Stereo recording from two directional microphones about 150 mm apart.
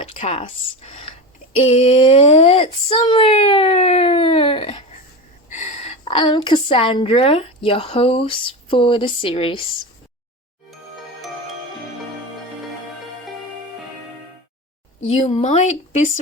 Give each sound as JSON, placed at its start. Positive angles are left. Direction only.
{"t": 0.0, "sound": "a woman's voice", "side_deg": 40}
{"t": 5.5, "sound": "gasp", "side_deg": 55}
{"t": 6.1, "sound": "a woman's voice", "side_deg": 30}
{"t": 15.1, "sound": "speech", "side_deg": 45}